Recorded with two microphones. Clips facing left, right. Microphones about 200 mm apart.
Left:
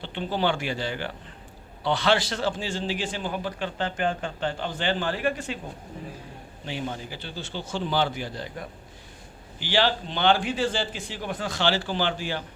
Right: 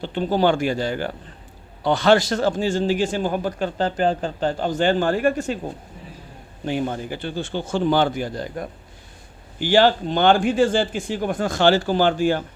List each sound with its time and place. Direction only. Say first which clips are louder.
0.0 s a man's voice: right 7 dB; 45° right (ahead or behind)
6.7 s a man's voice: right 8 dB; 50° right (ahead or behind)